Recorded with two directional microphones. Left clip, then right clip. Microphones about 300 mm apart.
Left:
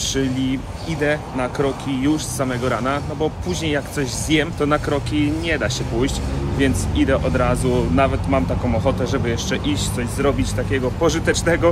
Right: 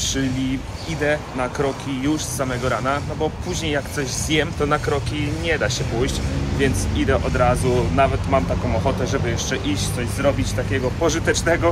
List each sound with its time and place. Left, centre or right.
0.0 s vehicle: centre
1.0 s speech: centre